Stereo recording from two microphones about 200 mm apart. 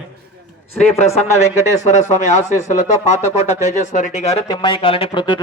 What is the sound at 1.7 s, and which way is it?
Speech, 35° left (ahead or behind).